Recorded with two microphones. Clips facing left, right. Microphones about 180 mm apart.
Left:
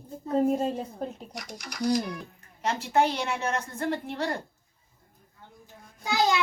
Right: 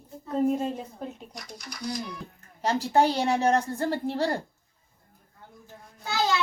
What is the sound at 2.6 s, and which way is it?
A woman's voice, 35° right (ahead or behind).